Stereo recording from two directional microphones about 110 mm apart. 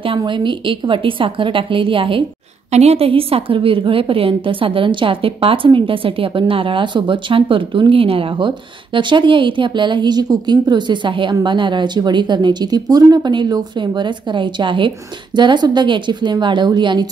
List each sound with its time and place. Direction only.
0.2 s a woman's voice: 50° right (ahead or behind)
2.7 s a woman's voice: 75° right (ahead or behind); by 17.1 s 45° right (ahead or behind)